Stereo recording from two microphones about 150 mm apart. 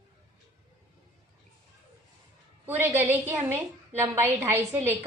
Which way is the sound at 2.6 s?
15° right (ahead or behind).